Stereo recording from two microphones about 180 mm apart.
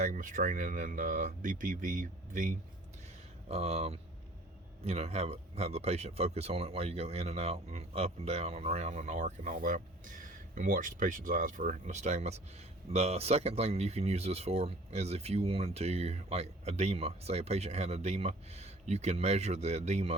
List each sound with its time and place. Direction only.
0.1 s speech: 50° right (ahead or behind)
3.5 s speech: 35° right (ahead or behind)